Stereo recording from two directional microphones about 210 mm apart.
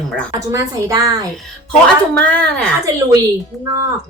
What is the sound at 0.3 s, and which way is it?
Speech, 15° right (ahead or behind).